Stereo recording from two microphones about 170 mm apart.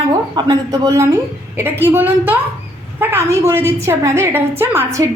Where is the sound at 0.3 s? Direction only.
25° right (ahead or behind).